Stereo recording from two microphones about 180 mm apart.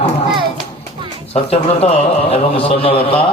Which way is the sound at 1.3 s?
35° left (ahead or behind).